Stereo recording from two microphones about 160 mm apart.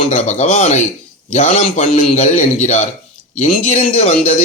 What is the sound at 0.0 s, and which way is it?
A man's voice, 50° left (ahead or behind).